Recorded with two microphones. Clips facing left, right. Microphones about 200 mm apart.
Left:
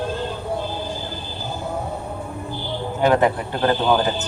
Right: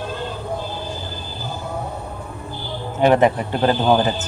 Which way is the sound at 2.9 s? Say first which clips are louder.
Right 3 dB; 20° right (ahead or behind).